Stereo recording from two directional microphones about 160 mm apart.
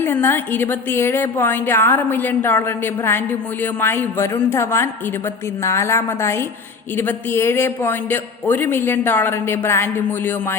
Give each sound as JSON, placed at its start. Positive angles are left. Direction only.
{"t": 0.0, "sound": "a woman's voice", "side_deg": 15}